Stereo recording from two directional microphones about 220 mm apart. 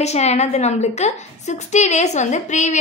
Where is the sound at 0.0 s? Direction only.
30° left (ahead or behind).